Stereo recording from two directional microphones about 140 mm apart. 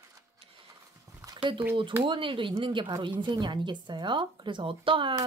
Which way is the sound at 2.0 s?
35° right (ahead or behind).